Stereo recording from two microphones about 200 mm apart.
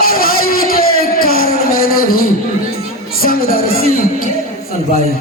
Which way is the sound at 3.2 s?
45° left (ahead or behind).